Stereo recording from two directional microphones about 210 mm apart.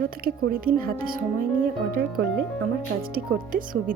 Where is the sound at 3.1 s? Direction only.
45° right (ahead or behind).